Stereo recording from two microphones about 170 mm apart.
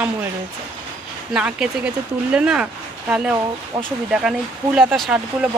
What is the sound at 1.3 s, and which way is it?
Speech, 5° right (ahead or behind).